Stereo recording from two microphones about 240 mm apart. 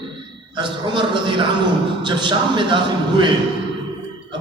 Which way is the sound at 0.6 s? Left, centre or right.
Centre.